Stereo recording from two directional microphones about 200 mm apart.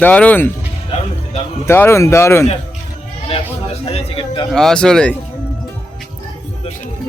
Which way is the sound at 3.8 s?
30° left (ahead or behind).